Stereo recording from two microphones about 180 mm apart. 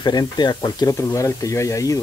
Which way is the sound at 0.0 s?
25° left (ahead or behind).